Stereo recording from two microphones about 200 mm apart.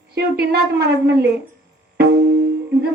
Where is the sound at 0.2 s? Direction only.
55° right (ahead or behind).